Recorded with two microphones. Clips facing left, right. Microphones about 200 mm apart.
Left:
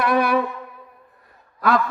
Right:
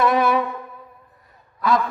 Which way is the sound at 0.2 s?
60° left (ahead or behind).